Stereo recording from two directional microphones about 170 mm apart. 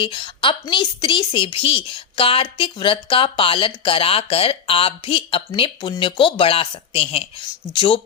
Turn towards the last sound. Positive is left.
turn(degrees=30)  # may be behind; listen again after turning